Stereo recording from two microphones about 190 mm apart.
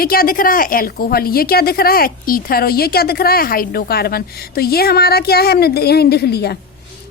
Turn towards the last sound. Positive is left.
turn(degrees=60)  # may be behind; listen again after turning